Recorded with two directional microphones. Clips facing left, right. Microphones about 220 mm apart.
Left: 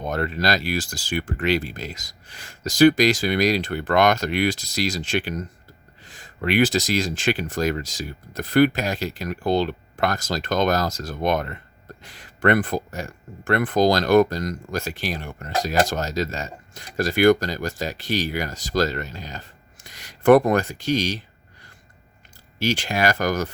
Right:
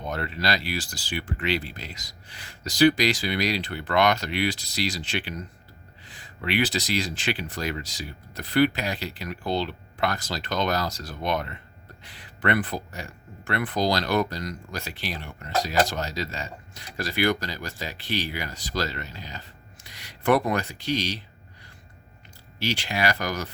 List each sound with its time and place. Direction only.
0.0 s speech: 45° left (ahead or behind)
22.5 s speech: 45° left (ahead or behind)